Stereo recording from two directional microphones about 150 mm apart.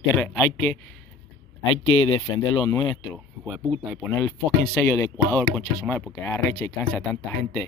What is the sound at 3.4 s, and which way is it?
Speech, 5° right (ahead or behind).